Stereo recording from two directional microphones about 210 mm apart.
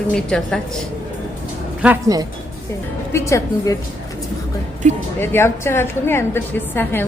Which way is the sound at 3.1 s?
15° left (ahead or behind).